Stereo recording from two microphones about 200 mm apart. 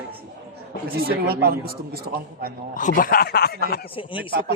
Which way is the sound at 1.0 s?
50° right (ahead or behind).